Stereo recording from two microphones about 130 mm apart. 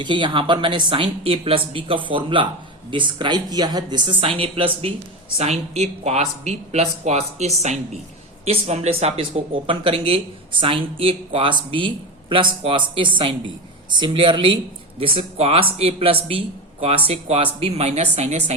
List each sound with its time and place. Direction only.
0.0 s speech: 40° right (ahead or behind)
5.4 s speech: 55° right (ahead or behind)